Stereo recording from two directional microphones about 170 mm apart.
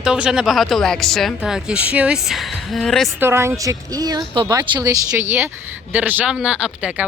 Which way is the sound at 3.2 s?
15° right (ahead or behind).